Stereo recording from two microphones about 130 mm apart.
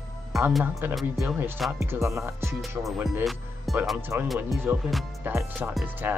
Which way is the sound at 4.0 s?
15° right (ahead or behind).